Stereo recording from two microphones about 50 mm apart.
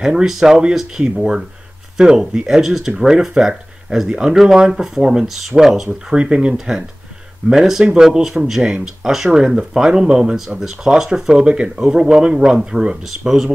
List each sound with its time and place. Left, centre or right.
0.0 s speech: centre